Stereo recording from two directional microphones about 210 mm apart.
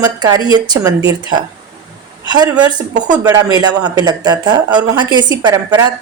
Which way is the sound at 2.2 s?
20° right (ahead or behind).